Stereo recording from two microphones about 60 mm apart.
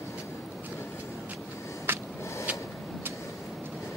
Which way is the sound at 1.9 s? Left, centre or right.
Right.